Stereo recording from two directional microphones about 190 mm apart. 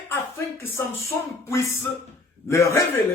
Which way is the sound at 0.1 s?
10° left (ahead or behind).